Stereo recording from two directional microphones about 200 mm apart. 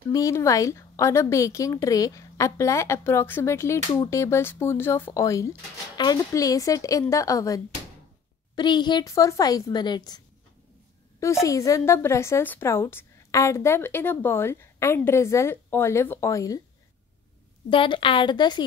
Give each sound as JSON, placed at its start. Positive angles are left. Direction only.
{"t": 0.1, "sound": "a woman's voice", "side_deg": 15}
{"t": 17.6, "sound": "speech", "side_deg": 25}